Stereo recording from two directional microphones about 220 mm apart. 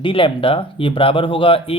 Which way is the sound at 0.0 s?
25° left (ahead or behind).